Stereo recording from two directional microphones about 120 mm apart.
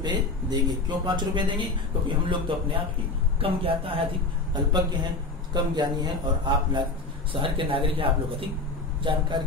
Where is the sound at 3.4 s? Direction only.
50° right (ahead or behind).